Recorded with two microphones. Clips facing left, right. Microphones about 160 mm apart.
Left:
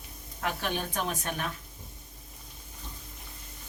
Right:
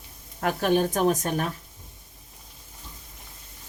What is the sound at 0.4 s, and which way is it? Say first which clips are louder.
Speech: right 10 dB; 45° right (ahead or behind).